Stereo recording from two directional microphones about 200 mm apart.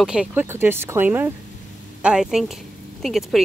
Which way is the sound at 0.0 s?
5° right (ahead or behind).